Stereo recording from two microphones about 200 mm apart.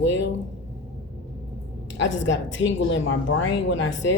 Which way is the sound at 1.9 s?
65° left (ahead or behind).